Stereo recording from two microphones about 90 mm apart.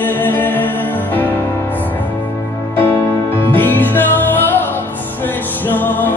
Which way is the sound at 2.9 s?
30° left (ahead or behind).